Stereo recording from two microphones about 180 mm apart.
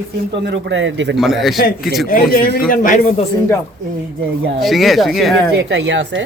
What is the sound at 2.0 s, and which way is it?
A man's voice, 50° left (ahead or behind).